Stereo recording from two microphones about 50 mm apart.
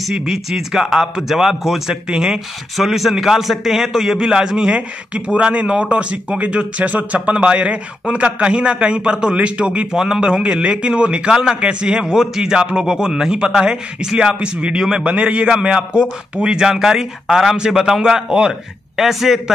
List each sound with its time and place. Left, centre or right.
0.0 s a man's voice: centre; by 9.8 s right
9.9 s a man's voice: centre